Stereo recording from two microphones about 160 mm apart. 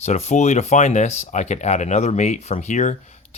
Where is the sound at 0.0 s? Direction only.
45° left (ahead or behind).